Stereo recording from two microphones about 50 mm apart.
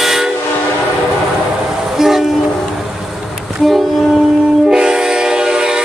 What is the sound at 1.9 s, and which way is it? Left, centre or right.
Train, centre.